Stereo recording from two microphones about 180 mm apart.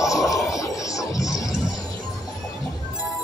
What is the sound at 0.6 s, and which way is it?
Music, 20° left (ahead or behind).